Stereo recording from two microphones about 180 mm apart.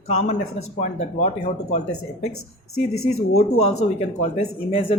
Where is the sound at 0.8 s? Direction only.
35° left (ahead or behind).